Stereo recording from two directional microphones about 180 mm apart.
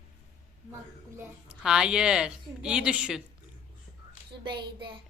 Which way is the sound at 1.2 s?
5° right (ahead or behind).